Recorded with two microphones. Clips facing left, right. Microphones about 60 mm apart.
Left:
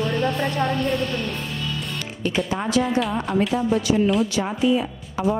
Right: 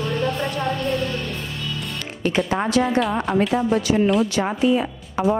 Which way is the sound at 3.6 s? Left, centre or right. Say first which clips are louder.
Right 1 dB; right.